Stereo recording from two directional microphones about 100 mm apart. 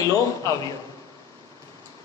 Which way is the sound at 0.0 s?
35° left (ahead or behind).